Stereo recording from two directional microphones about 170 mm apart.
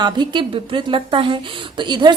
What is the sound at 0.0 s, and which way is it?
A woman's voice, 25° right (ahead or behind).